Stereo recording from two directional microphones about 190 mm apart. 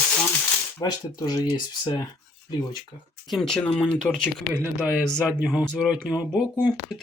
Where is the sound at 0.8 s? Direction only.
20° left (ahead or behind).